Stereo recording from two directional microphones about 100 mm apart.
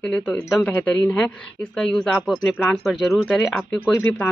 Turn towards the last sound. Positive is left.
turn(degrees=20)  # may be behind; listen again after turning